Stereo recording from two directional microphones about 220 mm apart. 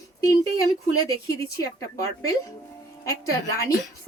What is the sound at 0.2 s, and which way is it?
Speech, 15° left (ahead or behind).